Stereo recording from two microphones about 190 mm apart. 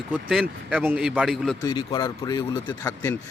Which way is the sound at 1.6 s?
25° left (ahead or behind).